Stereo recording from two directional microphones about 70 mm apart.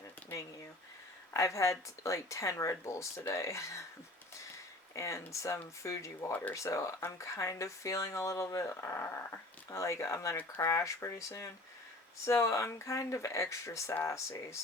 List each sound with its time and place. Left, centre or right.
0.3 s speech: left
4.9 s speech: left